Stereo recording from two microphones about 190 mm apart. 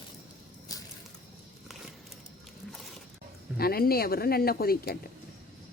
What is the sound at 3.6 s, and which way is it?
Speech, 55° left (ahead or behind).